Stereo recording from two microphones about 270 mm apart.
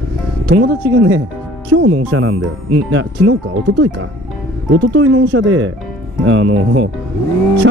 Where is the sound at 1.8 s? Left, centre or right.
Right.